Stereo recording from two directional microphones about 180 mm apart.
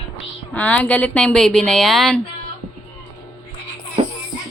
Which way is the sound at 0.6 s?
10° left (ahead or behind).